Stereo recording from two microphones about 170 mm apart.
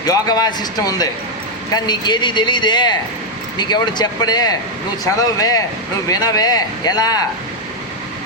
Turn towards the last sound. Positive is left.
turn(degrees=20)  # may be behind; listen again after turning